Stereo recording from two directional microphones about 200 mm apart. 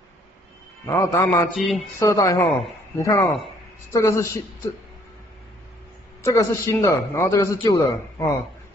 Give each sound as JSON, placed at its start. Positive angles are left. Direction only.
{"t": 0.8, "sound": "a man's voice", "side_deg": 15}
{"t": 1.5, "sound": "music", "side_deg": 0}
{"t": 2.0, "sound": "a man's voice", "side_deg": 15}
{"t": 6.2, "sound": "a man's voice", "side_deg": 15}